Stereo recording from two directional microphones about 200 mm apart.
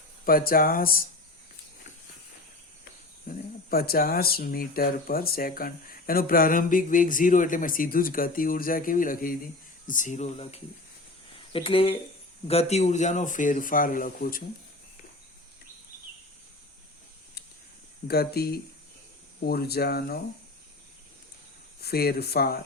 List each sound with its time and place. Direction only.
0.3 s speech: 45° left (ahead or behind)
3.2 s speech: 45° left (ahead or behind)
18.1 s speech: 50° left (ahead or behind)
21.8 s speech: 50° left (ahead or behind)